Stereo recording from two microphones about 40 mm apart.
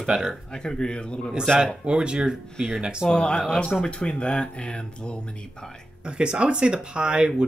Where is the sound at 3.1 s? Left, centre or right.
Left.